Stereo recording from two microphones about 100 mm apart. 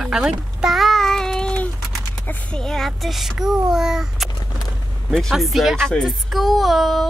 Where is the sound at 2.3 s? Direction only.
10° left (ahead or behind).